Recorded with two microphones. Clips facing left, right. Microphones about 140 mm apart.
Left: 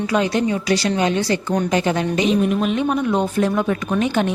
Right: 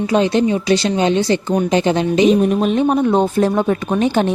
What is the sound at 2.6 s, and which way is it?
A woman's voice, 35° right (ahead or behind).